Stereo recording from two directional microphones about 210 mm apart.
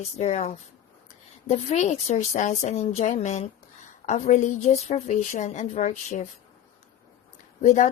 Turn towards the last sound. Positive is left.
turn(degrees=35)  # may be behind; listen again after turning